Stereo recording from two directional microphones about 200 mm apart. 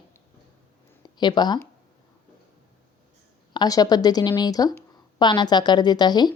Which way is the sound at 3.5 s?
20° left (ahead or behind).